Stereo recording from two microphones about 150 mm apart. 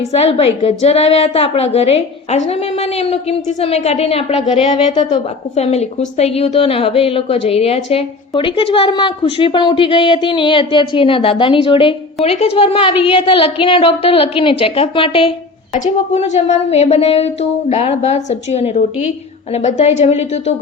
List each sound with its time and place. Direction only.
0.1 s a woman's voice: 45° left (ahead or behind)
4.9 s a woman's voice: 30° left (ahead or behind)
5.5 s a woman's voice: 45° left (ahead or behind)
15.7 s a woman's voice: 50° left (ahead or behind)